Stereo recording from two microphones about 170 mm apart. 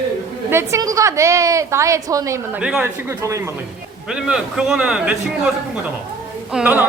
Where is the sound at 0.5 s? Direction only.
20° right (ahead or behind).